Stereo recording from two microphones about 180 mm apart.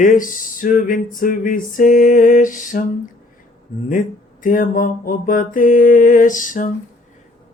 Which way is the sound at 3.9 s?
50° left (ahead or behind).